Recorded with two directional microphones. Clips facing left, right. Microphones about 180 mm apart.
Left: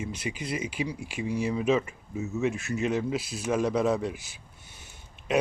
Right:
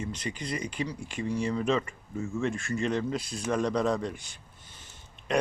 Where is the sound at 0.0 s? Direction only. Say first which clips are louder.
Left 1 dB; 10° left (ahead or behind).